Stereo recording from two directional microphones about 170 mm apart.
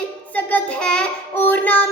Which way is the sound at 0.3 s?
10° left (ahead or behind).